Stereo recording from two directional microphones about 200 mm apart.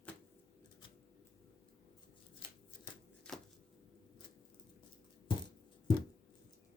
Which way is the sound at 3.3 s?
5° left (ahead or behind).